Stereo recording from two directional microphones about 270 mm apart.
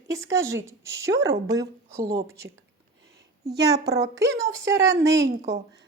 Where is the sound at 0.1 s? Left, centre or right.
Centre.